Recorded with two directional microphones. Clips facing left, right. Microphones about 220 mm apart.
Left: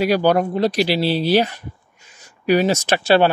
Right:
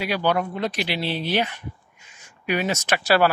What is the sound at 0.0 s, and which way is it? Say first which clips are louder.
Speech: left 7 dB; 40° left (ahead or behind).